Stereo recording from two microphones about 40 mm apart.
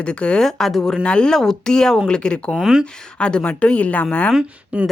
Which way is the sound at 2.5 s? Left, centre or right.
Centre.